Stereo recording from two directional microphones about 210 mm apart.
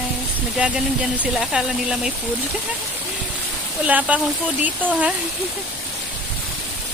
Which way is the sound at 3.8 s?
5° right (ahead or behind).